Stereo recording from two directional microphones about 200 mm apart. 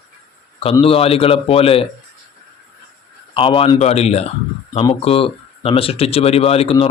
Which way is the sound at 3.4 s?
25° left (ahead or behind).